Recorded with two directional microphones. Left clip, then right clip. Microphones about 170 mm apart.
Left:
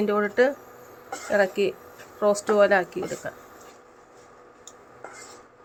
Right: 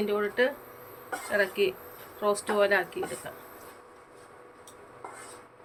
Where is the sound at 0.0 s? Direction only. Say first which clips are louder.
Left 5 dB; 55° left (ahead or behind).